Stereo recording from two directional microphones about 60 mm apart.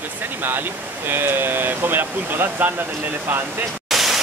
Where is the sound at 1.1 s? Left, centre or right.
Right.